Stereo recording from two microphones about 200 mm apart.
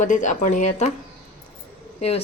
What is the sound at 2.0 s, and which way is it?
Speech, 30° left (ahead or behind).